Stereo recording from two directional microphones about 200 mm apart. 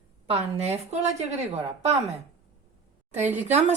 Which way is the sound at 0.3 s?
30° right (ahead or behind).